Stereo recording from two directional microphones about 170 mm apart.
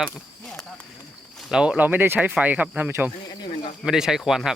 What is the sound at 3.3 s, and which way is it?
Snake, 25° left (ahead or behind).